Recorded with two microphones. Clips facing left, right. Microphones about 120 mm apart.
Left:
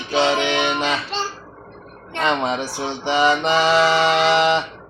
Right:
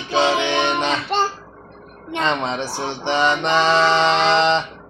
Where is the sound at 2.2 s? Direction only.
15° left (ahead or behind).